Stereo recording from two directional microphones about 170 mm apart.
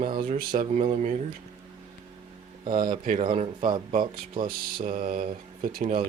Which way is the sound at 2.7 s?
50° right (ahead or behind).